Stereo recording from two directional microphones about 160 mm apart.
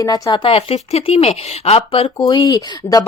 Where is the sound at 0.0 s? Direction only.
25° left (ahead or behind).